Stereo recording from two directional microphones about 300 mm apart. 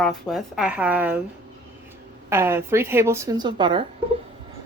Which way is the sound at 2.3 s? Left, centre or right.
Centre.